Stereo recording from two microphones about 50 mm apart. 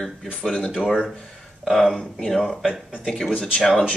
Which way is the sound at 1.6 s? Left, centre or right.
Centre.